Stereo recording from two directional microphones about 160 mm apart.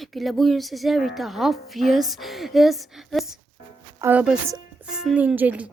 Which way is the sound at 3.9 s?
10° right (ahead or behind).